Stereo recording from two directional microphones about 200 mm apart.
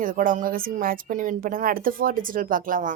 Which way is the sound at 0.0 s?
45° right (ahead or behind).